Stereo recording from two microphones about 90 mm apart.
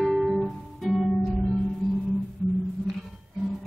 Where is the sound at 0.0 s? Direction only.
Centre (ahead or behind).